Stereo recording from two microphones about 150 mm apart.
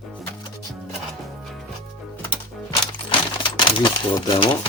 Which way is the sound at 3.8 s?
35° left (ahead or behind).